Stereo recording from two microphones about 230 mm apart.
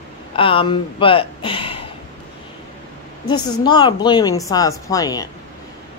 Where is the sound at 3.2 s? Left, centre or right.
Centre.